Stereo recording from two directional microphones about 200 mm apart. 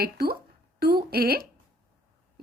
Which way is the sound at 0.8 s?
50° right (ahead or behind).